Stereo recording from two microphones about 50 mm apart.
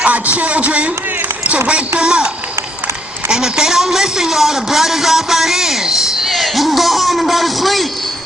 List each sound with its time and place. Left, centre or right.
0.0 s a man's voice: right; by 7.9 s centre